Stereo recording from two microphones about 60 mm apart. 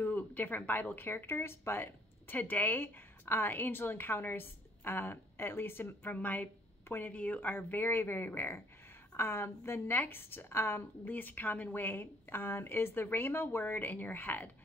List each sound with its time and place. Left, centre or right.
0.0 s a sound: left
0.9 s speech: left
11.1 s speech: left